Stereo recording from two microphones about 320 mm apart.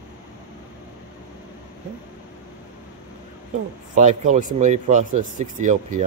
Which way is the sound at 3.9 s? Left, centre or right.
Right.